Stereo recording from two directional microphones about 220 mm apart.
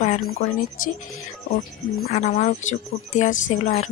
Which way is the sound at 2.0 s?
35° left (ahead or behind).